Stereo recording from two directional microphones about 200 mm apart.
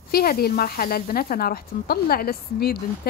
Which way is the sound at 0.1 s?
50° left (ahead or behind).